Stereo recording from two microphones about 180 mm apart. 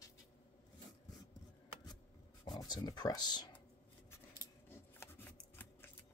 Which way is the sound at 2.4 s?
25° left (ahead or behind).